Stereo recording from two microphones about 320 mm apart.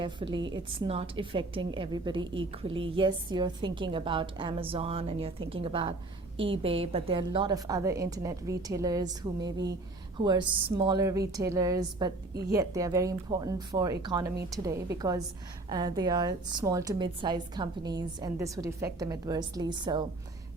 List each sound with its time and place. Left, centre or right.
0.0 s a woman's voice: centre